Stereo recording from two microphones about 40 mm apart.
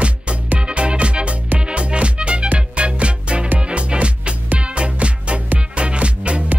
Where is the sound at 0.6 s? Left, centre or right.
Right.